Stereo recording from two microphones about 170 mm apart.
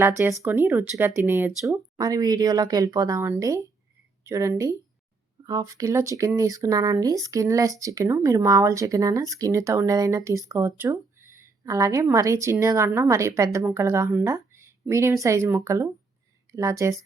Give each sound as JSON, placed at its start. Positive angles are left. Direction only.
{"t": 0.0, "sound": "a woman's voice", "side_deg": -20}